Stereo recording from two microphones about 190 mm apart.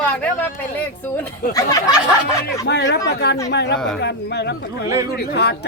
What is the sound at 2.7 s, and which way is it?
Speech, 60° left (ahead or behind).